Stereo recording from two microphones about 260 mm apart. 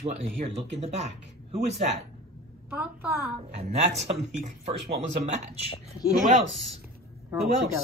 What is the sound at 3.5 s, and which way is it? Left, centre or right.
Speech, right.